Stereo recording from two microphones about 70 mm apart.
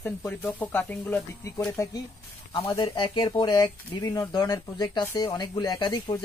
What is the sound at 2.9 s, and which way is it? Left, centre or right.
Speech, left.